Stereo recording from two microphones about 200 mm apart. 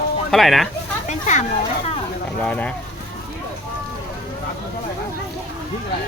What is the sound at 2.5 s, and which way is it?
Speech, 5° left (ahead or behind).